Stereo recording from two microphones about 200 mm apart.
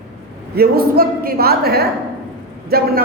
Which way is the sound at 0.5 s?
50° right (ahead or behind).